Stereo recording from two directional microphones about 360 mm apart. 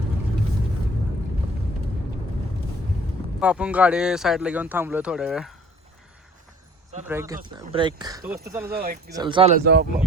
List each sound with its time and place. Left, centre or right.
3.4 s speech: centre
7.1 s speech: centre
8.7 s speech: right
9.1 s speech: centre